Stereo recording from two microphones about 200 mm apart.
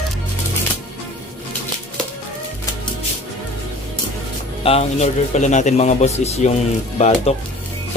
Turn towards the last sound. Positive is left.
turn(degrees=35)  # may be behind; listen again after turning